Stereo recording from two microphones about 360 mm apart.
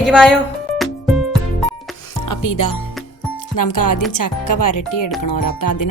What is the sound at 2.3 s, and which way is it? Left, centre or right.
Speech, left.